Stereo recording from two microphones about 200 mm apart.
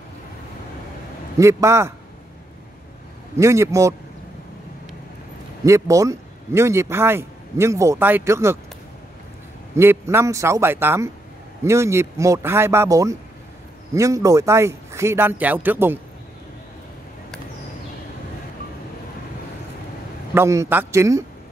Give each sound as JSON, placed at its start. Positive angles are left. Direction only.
{"t": 1.4, "sound": "a man's voice", "side_deg": -15}
{"t": 3.3, "sound": "a man's voice", "side_deg": -15}
{"t": 5.6, "sound": "a man's voice", "side_deg": -15}
{"t": 9.8, "sound": "a man's voice", "side_deg": -10}
{"t": 20.3, "sound": "a man's voice", "side_deg": -15}